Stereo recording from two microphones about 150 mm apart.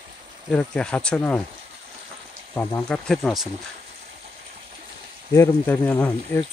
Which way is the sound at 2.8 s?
5° left (ahead or behind).